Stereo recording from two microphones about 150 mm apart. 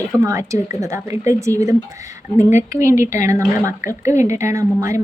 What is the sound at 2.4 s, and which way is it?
Speech, 55° left (ahead or behind).